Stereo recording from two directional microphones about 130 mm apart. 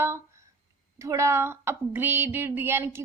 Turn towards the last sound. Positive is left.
turn(degrees=-15)  # may be behind; listen again after turning